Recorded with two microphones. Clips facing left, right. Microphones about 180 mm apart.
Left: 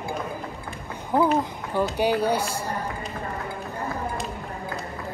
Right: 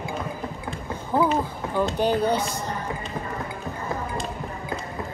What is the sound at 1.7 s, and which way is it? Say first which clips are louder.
Speech: even; 10° left (ahead or behind).